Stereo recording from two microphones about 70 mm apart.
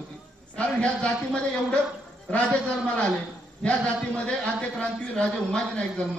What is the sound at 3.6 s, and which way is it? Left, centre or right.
A man's voice, centre.